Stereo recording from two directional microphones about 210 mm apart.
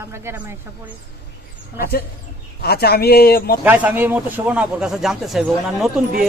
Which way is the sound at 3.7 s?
10° right (ahead or behind).